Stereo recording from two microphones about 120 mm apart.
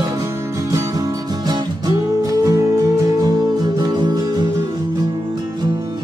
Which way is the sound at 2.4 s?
30° right (ahead or behind).